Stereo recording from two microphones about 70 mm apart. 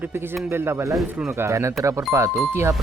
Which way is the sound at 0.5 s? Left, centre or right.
Right.